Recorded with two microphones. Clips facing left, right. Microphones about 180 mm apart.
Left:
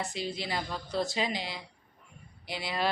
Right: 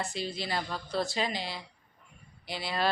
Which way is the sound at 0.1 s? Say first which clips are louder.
Even; 15° left (ahead or behind).